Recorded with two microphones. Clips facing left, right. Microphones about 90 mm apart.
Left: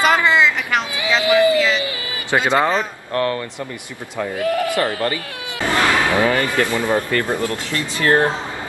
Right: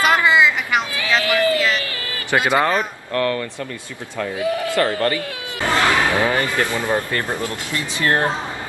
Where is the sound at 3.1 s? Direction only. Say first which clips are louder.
Even; 30° left (ahead or behind).